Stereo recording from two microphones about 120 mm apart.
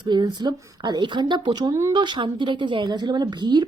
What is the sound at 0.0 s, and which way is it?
Speech, 40° right (ahead or behind).